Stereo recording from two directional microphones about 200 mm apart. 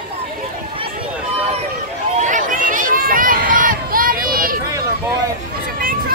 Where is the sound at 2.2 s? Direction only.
40° right (ahead or behind).